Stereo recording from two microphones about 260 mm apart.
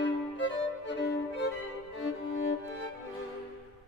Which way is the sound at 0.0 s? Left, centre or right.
Left.